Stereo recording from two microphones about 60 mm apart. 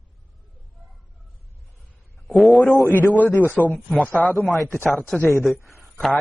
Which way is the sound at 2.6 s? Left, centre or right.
Left.